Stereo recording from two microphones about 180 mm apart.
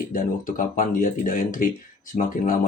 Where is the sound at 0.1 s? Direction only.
50° left (ahead or behind).